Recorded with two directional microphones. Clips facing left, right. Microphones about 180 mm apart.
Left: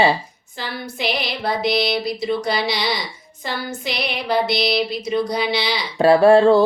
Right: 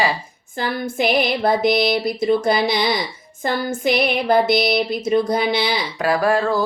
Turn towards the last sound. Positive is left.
turn(degrees=30)  # may be behind; listen again after turning